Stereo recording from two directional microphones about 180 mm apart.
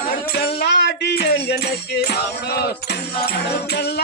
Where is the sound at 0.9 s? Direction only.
65° left (ahead or behind).